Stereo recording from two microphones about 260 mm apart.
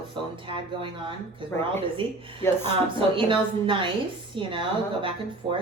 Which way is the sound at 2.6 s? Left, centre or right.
Centre.